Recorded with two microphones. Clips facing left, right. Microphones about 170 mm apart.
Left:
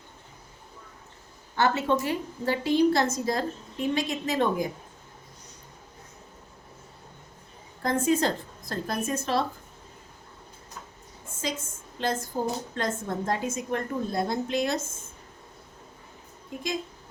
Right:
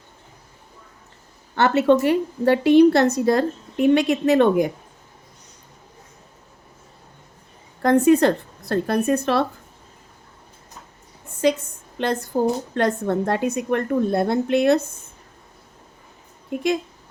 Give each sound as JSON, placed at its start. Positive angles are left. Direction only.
{"t": 1.5, "sound": "a woman's voice", "side_deg": -70}
{"t": 7.8, "sound": "a woman's voice", "side_deg": -65}
{"t": 11.3, "sound": "a woman's voice", "side_deg": -65}